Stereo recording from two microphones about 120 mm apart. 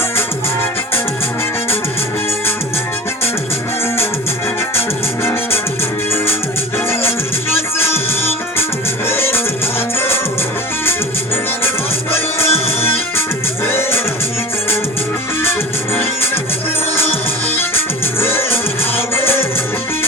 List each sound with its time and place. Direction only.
5.2 s music: 20° left (ahead or behind)
7.5 s music: 20° left (ahead or behind)
12.5 s music: 55° left (ahead or behind)
13.7 s music: 20° left (ahead or behind)
16.0 s music: 20° left (ahead or behind)
17.5 s music: 20° left (ahead or behind)